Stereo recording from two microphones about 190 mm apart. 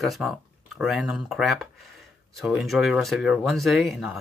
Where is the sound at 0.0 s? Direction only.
Centre (ahead or behind).